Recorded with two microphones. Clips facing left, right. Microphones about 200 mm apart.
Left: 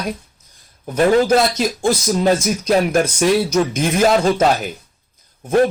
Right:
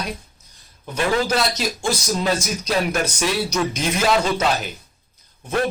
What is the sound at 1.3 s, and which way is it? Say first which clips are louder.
Speech: left 7 dB; 50° left (ahead or behind).